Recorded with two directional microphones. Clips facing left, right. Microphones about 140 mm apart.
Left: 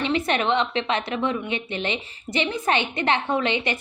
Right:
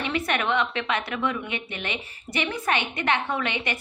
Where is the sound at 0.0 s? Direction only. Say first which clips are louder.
Left 3 dB; 25° left (ahead or behind).